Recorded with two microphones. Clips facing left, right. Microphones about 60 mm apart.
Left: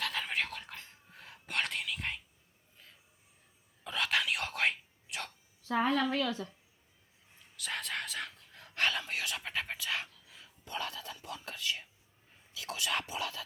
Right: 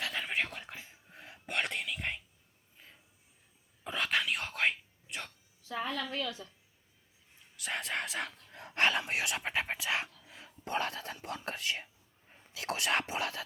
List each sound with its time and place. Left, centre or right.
0.0 s whispering: centre
2.7 s a sound: centre
3.8 s whispering: centre
5.6 s a sound: left
7.5 s speech: centre
8.4 s speech: right
10.7 s speech: right